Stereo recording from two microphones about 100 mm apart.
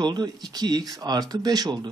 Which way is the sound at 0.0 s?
45° right (ahead or behind).